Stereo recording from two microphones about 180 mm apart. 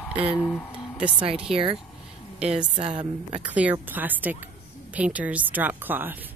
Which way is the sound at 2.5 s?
30° right (ahead or behind).